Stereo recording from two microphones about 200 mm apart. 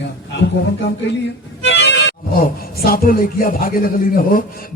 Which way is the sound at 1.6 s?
60° left (ahead or behind).